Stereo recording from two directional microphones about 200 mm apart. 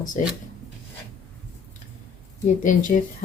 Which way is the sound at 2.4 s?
40° left (ahead or behind).